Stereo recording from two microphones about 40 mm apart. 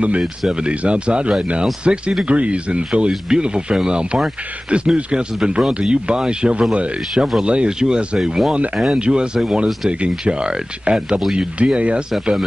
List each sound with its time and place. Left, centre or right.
0.5 s speech: right
8.2 s speech: centre
8.9 s speech: right